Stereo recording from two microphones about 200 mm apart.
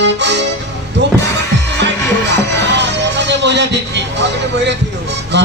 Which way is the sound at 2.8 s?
60° right (ahead or behind).